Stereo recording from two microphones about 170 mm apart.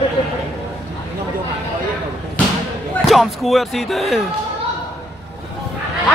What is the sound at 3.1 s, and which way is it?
A man's voice, centre (ahead or behind).